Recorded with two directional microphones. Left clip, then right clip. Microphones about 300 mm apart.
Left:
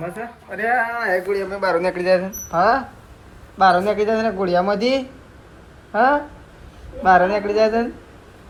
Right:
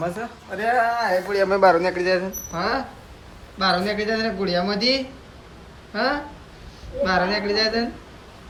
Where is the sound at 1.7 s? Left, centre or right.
Centre.